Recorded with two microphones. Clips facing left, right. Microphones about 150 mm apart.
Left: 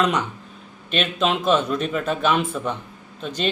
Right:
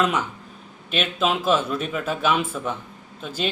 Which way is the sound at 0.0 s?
5° right (ahead or behind).